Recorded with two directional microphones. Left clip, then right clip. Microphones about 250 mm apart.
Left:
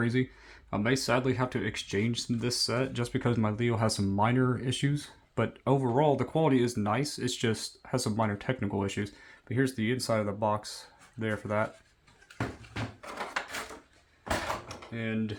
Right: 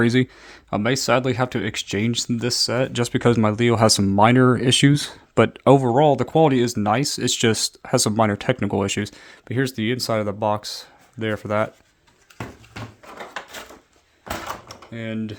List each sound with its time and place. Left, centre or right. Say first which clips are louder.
0.0 s speech: right 11 dB; right
14.4 s drawer open or close: right 3 dB; right